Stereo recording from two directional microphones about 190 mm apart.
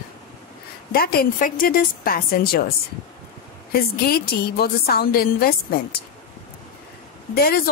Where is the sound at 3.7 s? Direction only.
55° left (ahead or behind).